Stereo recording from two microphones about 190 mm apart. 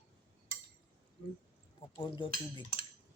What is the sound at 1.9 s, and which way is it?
Cutlery, 20° left (ahead or behind).